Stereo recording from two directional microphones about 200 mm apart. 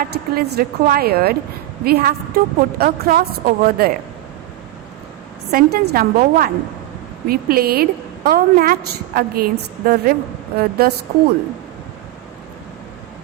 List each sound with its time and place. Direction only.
0.0 s a woman's voice: 50° right (ahead or behind)
5.5 s a woman's voice: 50° right (ahead or behind)